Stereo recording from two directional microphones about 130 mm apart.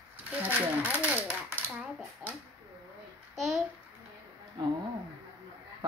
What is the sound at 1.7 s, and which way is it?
Dishes, 5° right (ahead or behind).